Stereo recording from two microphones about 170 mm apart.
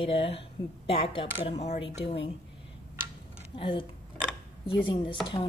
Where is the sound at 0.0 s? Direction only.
35° left (ahead or behind).